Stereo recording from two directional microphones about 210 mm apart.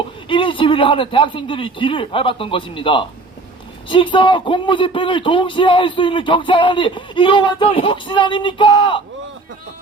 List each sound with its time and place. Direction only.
0.3 s a man's voice: 25° left (ahead or behind)